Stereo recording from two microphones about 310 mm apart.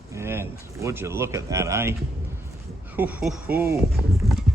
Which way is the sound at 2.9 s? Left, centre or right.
Centre.